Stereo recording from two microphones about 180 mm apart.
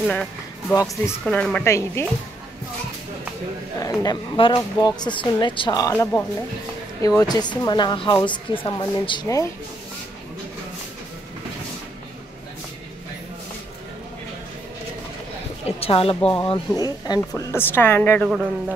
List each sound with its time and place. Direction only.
0.0 s a woman's voice: 5° left (ahead or behind)
3.8 s speech: 20° left (ahead or behind)
15.6 s a woman's voice: 30° left (ahead or behind)
16.2 s a woman's voice: 10° left (ahead or behind)
16.4 s a woman's voice: 25° left (ahead or behind)